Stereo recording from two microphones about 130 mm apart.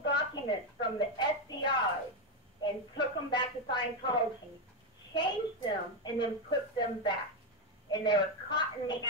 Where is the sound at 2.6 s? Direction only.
35° left (ahead or behind).